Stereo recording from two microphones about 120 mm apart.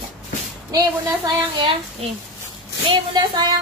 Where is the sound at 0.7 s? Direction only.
35° right (ahead or behind).